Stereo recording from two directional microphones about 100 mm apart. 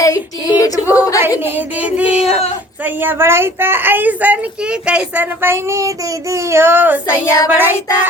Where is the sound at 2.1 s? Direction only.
90° left.